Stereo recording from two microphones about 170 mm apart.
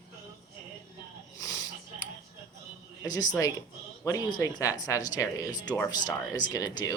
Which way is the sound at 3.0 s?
20° left (ahead or behind).